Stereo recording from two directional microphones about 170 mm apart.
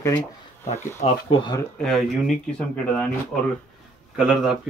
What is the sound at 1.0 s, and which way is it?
Speech, 40° left (ahead or behind).